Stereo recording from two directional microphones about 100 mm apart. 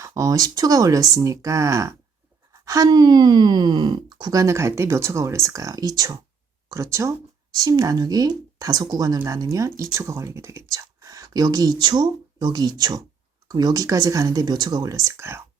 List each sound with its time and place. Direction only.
0.0 s speech: 35° right (ahead or behind)